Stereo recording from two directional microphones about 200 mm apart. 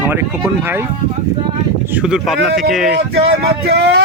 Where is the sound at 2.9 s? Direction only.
55° right (ahead or behind).